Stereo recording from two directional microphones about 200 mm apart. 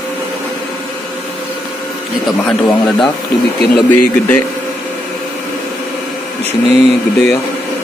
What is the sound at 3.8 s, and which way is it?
Speech, 10° left (ahead or behind).